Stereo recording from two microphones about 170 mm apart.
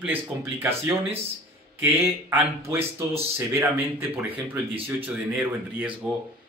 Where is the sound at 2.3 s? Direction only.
15° right (ahead or behind).